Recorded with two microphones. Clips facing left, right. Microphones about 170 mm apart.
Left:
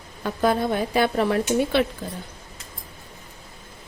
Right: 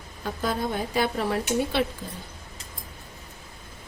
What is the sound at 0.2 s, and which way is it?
Speech, 70° left (ahead or behind).